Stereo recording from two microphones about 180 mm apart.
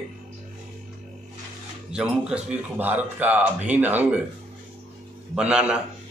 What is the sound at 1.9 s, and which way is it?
Speech, 5° right (ahead or behind).